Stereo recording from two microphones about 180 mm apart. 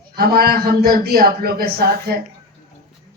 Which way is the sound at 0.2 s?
60° right (ahead or behind).